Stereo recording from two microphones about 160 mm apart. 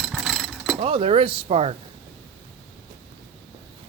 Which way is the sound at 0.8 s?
35° right (ahead or behind).